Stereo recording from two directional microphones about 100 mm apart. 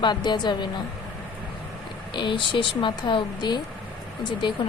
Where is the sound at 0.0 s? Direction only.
45° left (ahead or behind).